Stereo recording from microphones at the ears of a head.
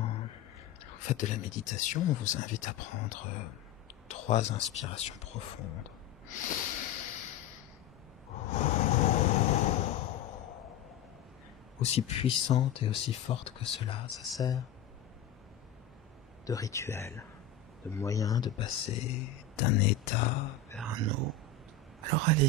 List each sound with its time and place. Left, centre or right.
0.0 s whispering: left
0.8 s speech: left
4.1 s a sound: left
11.8 s speech: left
18.3 s speech: left
20.8 s speech: right